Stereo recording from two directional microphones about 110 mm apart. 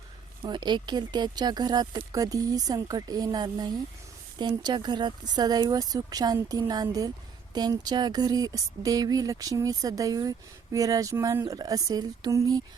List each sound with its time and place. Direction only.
0.4 s speech: 40° right (ahead or behind)